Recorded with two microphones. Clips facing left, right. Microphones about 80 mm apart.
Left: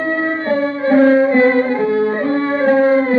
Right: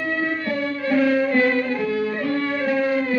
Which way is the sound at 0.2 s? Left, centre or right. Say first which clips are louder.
Left 7 dB; left.